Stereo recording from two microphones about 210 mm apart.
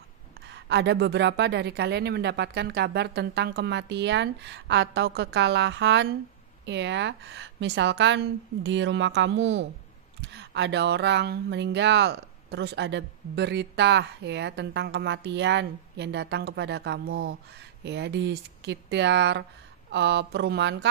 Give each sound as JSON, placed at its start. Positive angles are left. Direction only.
{"t": 0.5, "sound": "speech", "side_deg": -55}